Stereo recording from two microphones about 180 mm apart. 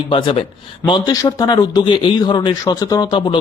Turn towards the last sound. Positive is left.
turn(degrees=25)  # may be behind; listen again after turning